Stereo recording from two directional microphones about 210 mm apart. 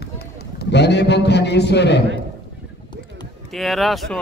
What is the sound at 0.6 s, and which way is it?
A man's voice, 55° left (ahead or behind).